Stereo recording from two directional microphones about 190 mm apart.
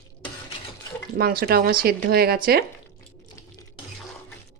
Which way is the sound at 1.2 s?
55° right (ahead or behind).